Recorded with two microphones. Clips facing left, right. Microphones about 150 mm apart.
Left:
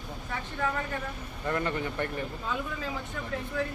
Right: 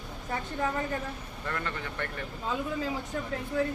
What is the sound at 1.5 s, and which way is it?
Speech, 15° left (ahead or behind).